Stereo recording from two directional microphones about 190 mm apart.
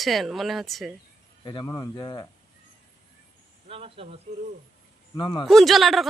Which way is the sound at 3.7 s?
30° right (ahead or behind).